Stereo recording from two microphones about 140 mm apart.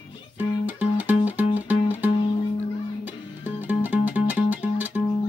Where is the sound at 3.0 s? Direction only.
10° right (ahead or behind).